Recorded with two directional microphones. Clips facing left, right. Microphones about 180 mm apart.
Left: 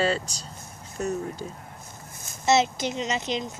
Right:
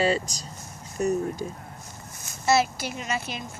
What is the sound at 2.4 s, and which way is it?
A child's voice, 20° left (ahead or behind).